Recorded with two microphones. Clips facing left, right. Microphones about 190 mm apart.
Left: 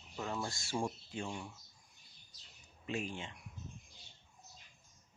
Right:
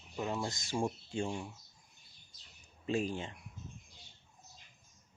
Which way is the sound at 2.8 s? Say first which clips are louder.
Right 6 dB; 35° right (ahead or behind).